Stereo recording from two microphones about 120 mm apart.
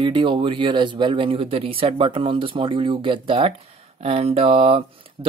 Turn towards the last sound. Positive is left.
turn(degrees=-50)  # may be behind; listen again after turning